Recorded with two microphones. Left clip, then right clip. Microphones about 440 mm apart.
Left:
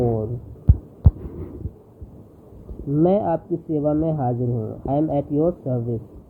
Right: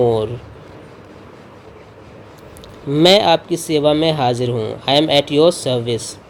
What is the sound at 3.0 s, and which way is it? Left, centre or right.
Speech, right.